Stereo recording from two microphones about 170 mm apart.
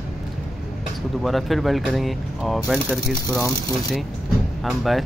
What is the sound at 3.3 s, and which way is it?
Speech, 20° left (ahead or behind).